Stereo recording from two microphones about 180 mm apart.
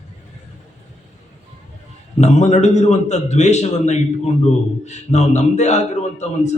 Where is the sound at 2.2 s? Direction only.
40° left (ahead or behind).